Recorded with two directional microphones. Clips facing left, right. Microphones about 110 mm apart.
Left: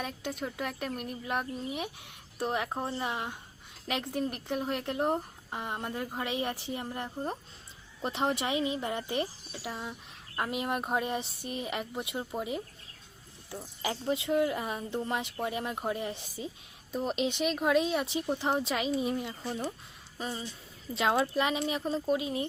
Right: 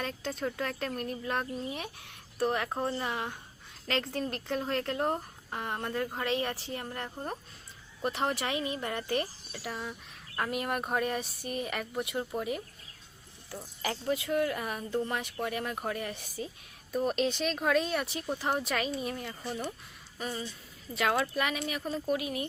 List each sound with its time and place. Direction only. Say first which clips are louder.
0.0 s speech: right 2 dB; 10° left (ahead or behind)